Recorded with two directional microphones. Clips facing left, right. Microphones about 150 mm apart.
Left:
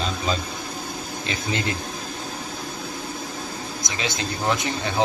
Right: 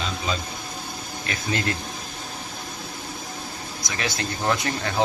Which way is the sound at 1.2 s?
20° left (ahead or behind).